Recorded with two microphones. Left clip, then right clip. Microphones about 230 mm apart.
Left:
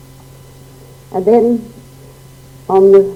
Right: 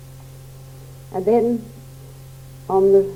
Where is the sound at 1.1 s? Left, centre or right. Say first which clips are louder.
Left 7 dB; left.